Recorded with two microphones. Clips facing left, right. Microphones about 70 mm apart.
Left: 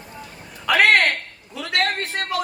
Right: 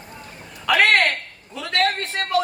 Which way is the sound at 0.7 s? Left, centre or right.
Centre.